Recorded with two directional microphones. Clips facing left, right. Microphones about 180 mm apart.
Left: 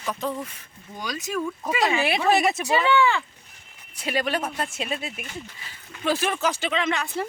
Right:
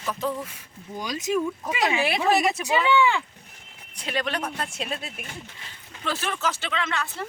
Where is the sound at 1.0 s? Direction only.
25° right (ahead or behind).